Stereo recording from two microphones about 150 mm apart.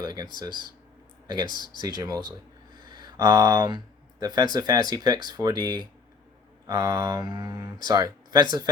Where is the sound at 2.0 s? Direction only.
25° right (ahead or behind).